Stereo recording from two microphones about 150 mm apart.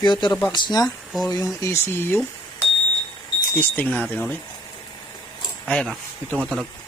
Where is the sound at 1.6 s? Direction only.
15° left (ahead or behind).